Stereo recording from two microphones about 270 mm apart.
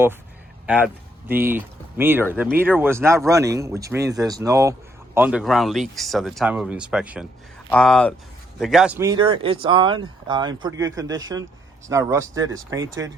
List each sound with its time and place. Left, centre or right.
1.3 s speech: centre